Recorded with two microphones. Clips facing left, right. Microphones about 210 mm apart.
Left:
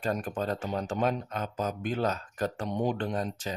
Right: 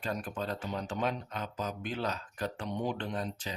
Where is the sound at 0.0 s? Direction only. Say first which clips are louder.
Left 5 dB; 45° left (ahead or behind).